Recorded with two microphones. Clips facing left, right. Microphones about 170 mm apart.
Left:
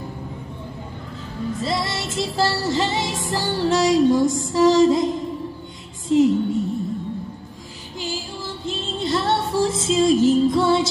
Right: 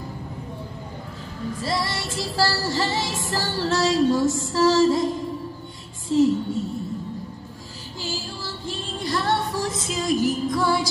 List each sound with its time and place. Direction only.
1.6 s music: 20° left (ahead or behind)
6.0 s a woman's voice: 20° left (ahead or behind)
8.0 s music: 20° left (ahead or behind)